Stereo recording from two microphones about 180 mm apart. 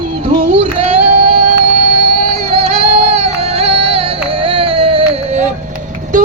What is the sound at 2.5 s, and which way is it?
Music, 35° right (ahead or behind).